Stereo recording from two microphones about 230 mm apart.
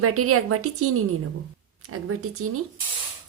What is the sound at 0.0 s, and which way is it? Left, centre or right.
A woman's voice, right.